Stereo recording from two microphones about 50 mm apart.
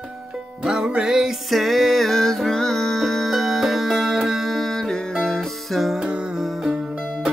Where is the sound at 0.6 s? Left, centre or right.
Centre.